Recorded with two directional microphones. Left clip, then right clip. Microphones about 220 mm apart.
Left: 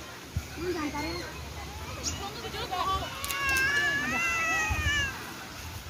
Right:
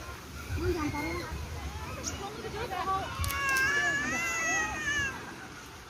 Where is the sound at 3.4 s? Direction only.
35° right (ahead or behind); by 5.0 s 20° right (ahead or behind).